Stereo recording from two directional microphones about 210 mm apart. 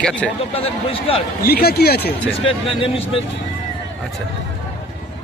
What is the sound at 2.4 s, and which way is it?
Speech, 25° left (ahead or behind).